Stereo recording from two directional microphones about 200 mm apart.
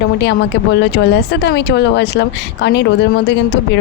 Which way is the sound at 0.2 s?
60° left (ahead or behind).